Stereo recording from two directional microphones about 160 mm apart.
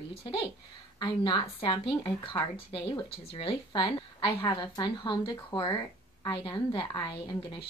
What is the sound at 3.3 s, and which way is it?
A woman's voice, 30° left (ahead or behind).